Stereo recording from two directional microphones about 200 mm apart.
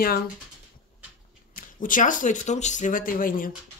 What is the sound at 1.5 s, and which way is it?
Speech, 40° left (ahead or behind).